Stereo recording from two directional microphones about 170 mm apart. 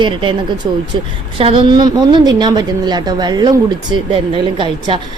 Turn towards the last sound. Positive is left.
turn(degrees=-30)  # may be behind; listen again after turning